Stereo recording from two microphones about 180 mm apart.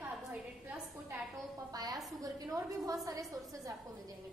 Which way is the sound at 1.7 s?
20° right (ahead or behind).